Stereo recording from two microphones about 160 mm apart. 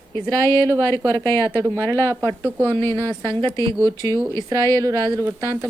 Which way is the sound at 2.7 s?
15° left (ahead or behind).